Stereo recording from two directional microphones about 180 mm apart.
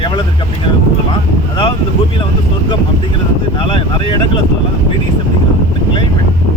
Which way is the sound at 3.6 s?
30° left (ahead or behind).